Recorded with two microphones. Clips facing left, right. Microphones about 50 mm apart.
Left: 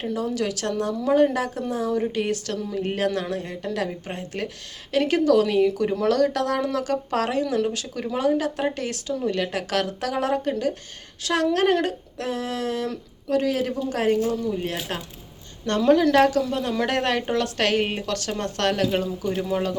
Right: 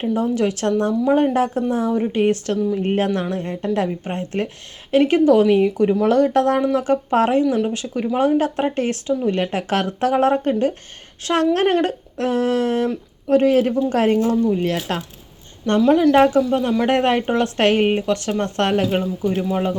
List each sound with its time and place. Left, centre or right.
0.0 s speech: right
2.6 s speech: centre
2.8 s speech: right
8.2 s speech: right
15.6 s speech: centre
16.1 s speech: right
19.4 s speech: centre